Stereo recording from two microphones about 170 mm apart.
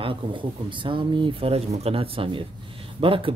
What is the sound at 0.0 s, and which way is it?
Speech, 30° right (ahead or behind).